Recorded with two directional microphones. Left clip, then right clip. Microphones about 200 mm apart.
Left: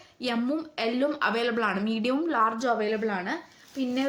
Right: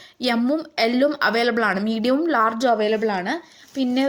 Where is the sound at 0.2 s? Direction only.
40° right (ahead or behind).